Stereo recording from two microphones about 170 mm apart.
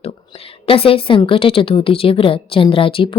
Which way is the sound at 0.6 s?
35° left (ahead or behind).